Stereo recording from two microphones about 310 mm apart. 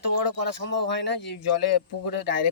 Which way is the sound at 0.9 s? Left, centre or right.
Left.